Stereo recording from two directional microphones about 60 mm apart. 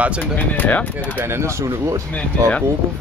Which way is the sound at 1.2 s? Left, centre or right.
Right.